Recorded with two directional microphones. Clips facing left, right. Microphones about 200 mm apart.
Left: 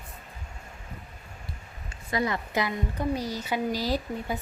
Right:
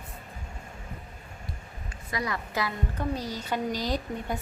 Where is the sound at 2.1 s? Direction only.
25° left (ahead or behind); by 4.4 s 5° left (ahead or behind).